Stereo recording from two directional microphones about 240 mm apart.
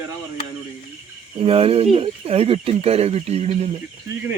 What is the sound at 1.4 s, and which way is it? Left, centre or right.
Speech, right.